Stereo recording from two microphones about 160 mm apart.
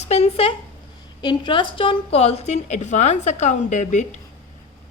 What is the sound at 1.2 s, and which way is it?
A woman's voice, 30° left (ahead or behind).